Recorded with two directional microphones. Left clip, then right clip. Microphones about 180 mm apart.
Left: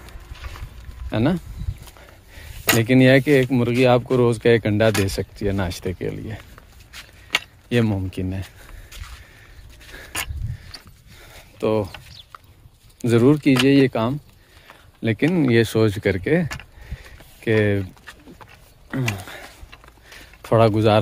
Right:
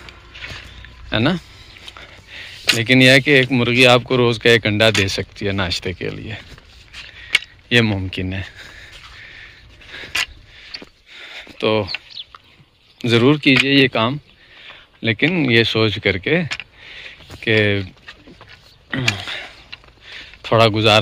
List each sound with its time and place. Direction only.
1.1 s speech: 10° left (ahead or behind)
1.9 s a sound: 15° left (ahead or behind)
2.8 s speech: 15° left (ahead or behind)
7.7 s speech: 10° left (ahead or behind)
9.9 s dog: 25° left (ahead or behind)
11.1 s a sound: 10° left (ahead or behind)
13.0 s speech: 20° left (ahead or behind)
15.7 s speech: 30° left (ahead or behind); by 18.1 s 15° left (ahead or behind)
19.1 s a sound: 15° left (ahead or behind)
20.4 s speech: 20° left (ahead or behind)